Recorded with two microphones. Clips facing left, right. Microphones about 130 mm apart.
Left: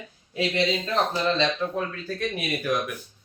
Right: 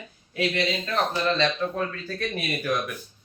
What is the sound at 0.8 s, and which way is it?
Speech, 20° left (ahead or behind).